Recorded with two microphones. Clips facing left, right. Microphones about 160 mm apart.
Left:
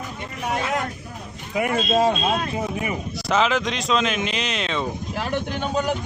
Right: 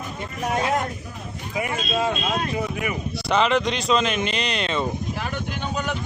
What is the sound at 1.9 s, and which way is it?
Speech, 40° left (ahead or behind).